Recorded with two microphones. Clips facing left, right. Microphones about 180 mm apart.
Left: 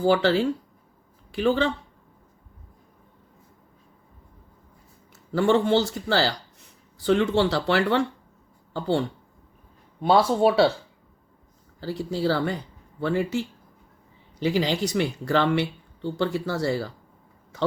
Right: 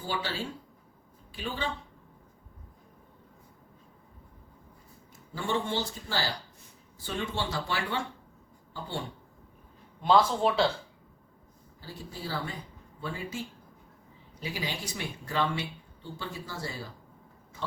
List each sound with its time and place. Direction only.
0.0 s speech: 90° left
5.3 s speech: 85° left
10.2 s speech: 70° left (ahead or behind)
11.8 s speech: 80° left